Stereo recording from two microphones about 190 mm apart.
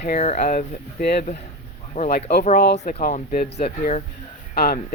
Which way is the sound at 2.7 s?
35° left (ahead or behind).